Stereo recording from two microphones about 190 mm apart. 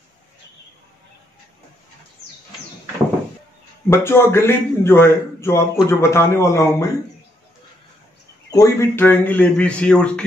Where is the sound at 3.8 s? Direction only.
10° left (ahead or behind).